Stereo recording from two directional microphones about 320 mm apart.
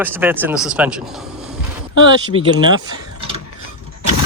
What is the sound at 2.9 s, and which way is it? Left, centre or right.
Mechanisms, centre.